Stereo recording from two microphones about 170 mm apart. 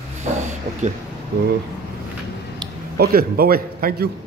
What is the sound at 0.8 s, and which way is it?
Speech, 45° right (ahead or behind).